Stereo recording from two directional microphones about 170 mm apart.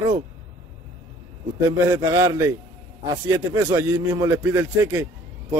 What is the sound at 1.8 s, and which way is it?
A man's voice, 15° right (ahead or behind).